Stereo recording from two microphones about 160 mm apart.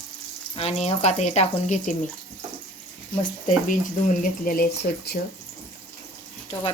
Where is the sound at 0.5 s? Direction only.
40° left (ahead or behind).